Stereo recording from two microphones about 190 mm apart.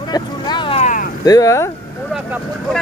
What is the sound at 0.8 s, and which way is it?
Vehicle, 40° left (ahead or behind).